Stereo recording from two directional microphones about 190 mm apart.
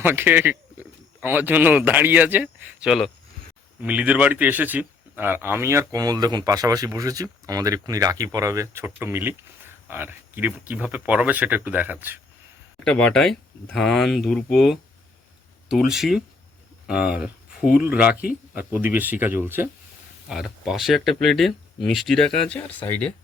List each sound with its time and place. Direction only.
0.0 s speech: 10° right (ahead or behind)
12.8 s speech: 5° left (ahead or behind)